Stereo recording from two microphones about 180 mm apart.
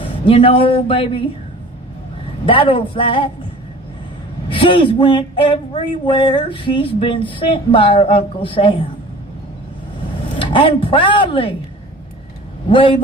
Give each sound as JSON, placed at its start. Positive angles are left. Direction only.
{"t": 0.0, "sound": "speech", "side_deg": 30}
{"t": 2.5, "sound": "speech", "side_deg": 30}
{"t": 4.4, "sound": "speech", "side_deg": 30}
{"t": 10.3, "sound": "speech", "side_deg": 30}
{"t": 12.6, "sound": "speech", "side_deg": 30}